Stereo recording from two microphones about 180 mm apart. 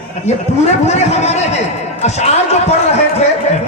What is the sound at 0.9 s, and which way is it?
Speech, 40° left (ahead or behind).